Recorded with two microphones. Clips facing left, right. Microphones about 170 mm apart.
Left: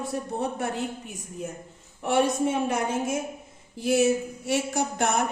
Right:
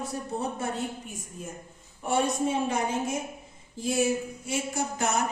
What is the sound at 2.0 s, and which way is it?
Speech, 70° left (ahead or behind).